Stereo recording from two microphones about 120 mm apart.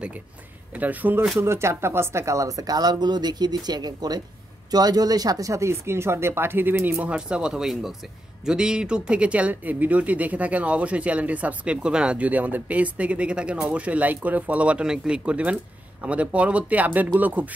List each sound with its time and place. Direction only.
0.7 s speech: 15° right (ahead or behind)